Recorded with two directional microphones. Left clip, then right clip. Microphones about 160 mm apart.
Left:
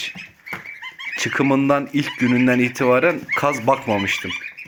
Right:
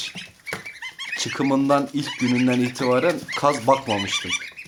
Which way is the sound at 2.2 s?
35° left (ahead or behind).